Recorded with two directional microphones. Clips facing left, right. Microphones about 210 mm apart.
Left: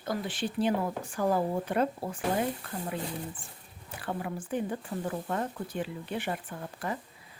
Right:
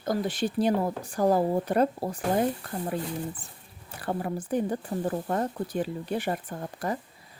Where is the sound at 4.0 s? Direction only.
40° right (ahead or behind).